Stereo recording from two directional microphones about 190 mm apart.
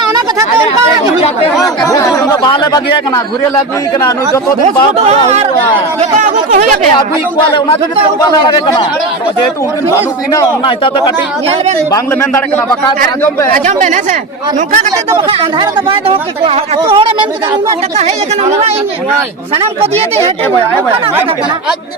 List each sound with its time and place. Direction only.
1.6 s speech: 20° left (ahead or behind)
4.6 s speech: 35° right (ahead or behind)
8.2 s speech: 20° left (ahead or behind)
13.5 s speech: 40° right (ahead or behind)
15.3 s speech: 30° right (ahead or behind)
19.5 s speech: 30° right (ahead or behind)